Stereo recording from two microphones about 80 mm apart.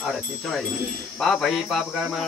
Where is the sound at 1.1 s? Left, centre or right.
Centre.